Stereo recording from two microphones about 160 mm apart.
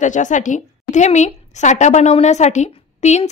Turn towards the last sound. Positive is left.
turn(degrees=40)  # may be behind; listen again after turning